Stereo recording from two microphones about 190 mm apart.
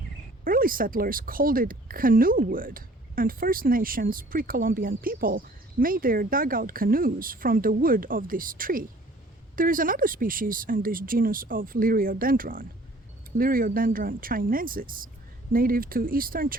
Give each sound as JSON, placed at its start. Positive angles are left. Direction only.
{"t": 0.4, "sound": "a woman's voice", "side_deg": -45}